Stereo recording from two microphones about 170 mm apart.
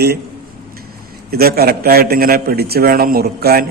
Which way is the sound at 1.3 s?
65° right (ahead or behind).